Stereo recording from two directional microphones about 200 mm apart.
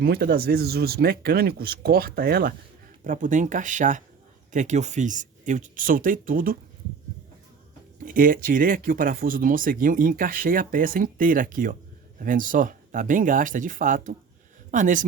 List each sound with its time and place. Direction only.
0.0 s speech: 50° right (ahead or behind)
8.0 s speech: 45° right (ahead or behind)